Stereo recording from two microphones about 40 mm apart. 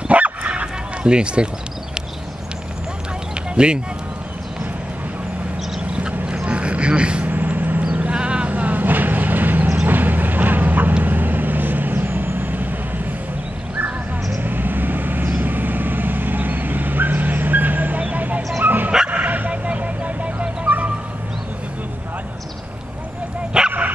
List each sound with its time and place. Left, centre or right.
0.1 s bow-wow: right
0.5 s a sound: right
3.5 s speech: right
6.4 s a sound: right
7.2 s vehicle: right
8.1 s a sound: right
8.5 s vehicle: right
14.4 s vehicle: right
18.6 s dog: right
19.0 s bow-wow: right
19.5 s vehicle: right
23.5 s dog: right